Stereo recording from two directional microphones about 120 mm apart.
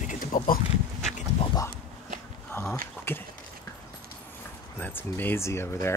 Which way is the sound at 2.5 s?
20° left (ahead or behind).